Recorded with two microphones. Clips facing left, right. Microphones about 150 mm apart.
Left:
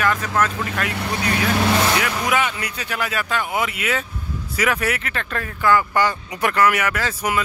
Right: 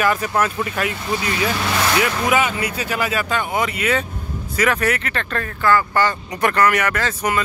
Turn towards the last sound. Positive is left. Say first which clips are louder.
# right 2 dB
turn(degrees=10)  # may be behind; listen again after turning